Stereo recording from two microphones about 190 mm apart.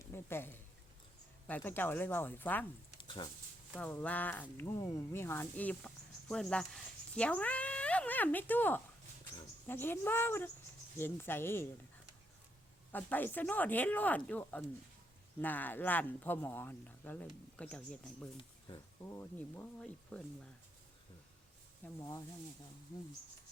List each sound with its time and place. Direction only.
0.1 s speech: 10° left (ahead or behind)
3.0 s a sound: 25° left (ahead or behind)
3.8 s speech: 5° left (ahead or behind)
12.9 s speech: 10° left (ahead or behind)
18.3 s speech: 20° left (ahead or behind)
21.9 s speech: 15° left (ahead or behind)